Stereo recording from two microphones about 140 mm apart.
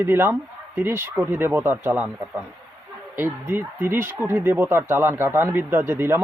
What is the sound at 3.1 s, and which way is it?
Speech, 15° right (ahead or behind).